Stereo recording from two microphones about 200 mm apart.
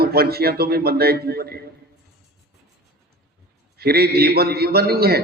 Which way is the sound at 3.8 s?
50° right (ahead or behind).